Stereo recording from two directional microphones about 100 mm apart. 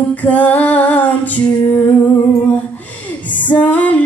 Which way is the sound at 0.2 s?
15° left (ahead or behind).